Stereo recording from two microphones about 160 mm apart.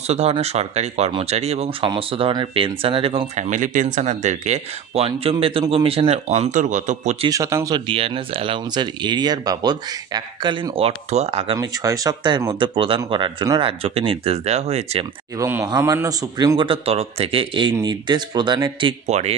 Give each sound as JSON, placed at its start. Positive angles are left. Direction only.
{"t": 0.1, "sound": "speech", "side_deg": -40}
{"t": 3.4, "sound": "speech", "side_deg": -50}
{"t": 7.2, "sound": "speech", "side_deg": -20}
{"t": 7.9, "sound": "speech", "side_deg": -35}
{"t": 11.1, "sound": "speech", "side_deg": -40}
{"t": 11.5, "sound": "speech", "side_deg": -20}
{"t": 15.3, "sound": "speech", "side_deg": -20}
{"t": 19.0, "sound": "speech", "side_deg": -45}